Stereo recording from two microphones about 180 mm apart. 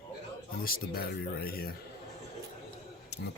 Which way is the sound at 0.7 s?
55° left (ahead or behind).